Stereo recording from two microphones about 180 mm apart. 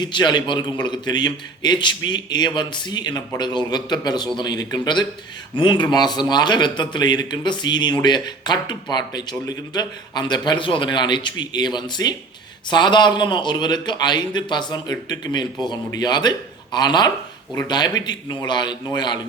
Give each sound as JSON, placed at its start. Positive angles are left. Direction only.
{"t": 0.0, "sound": "a man's voice", "side_deg": 25}